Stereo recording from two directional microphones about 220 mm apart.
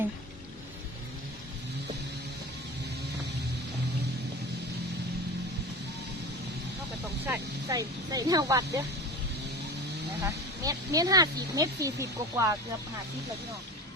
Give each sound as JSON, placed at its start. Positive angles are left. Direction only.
{"t": 7.3, "sound": "speech", "side_deg": -15}
{"t": 10.2, "sound": "speech", "side_deg": -15}